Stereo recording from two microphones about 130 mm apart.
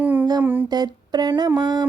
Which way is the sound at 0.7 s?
30° right (ahead or behind).